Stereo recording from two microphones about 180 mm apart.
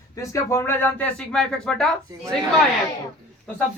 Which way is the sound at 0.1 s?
15° left (ahead or behind).